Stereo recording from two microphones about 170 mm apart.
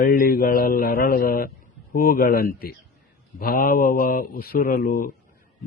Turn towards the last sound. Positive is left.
turn(degrees=60)  # may be behind; listen again after turning